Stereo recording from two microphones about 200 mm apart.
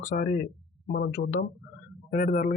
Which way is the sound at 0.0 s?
45° left (ahead or behind).